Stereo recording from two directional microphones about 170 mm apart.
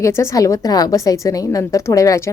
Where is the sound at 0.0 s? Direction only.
15° left (ahead or behind).